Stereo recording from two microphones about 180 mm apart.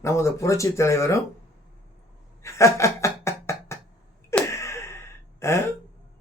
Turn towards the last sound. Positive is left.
turn(degrees=15)  # may be behind; listen again after turning